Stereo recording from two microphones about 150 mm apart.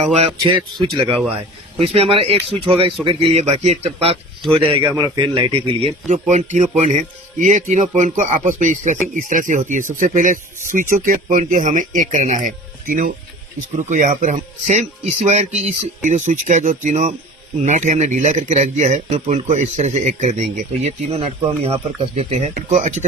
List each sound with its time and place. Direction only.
0.1 s speech: 45° right (ahead or behind)
1.8 s speech: 40° right (ahead or behind)
4.9 s speech: 25° right (ahead or behind)
6.1 s speech: 55° right (ahead or behind)
22.7 s speech: 55° right (ahead or behind)